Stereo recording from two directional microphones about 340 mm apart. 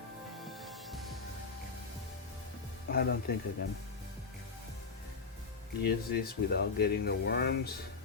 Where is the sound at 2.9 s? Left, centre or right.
Left.